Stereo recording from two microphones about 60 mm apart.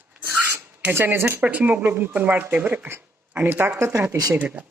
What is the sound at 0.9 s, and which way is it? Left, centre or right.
Speech, right.